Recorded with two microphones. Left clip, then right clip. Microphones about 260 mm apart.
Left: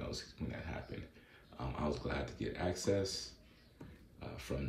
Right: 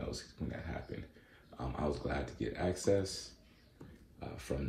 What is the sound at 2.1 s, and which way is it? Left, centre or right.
Speech, centre.